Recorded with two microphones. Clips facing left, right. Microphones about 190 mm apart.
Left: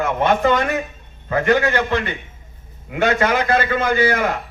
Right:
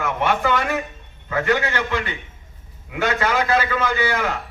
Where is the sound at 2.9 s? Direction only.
25° left (ahead or behind).